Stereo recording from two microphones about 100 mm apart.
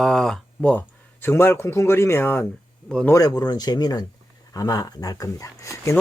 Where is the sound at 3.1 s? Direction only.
40° left (ahead or behind).